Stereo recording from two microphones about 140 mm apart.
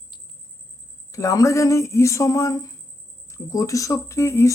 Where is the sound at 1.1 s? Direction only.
25° left (ahead or behind).